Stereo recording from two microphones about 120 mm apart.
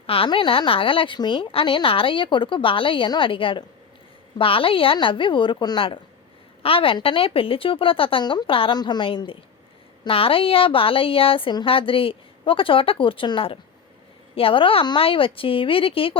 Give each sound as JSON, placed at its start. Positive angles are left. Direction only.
{"t": 0.1, "sound": "speech", "side_deg": 50}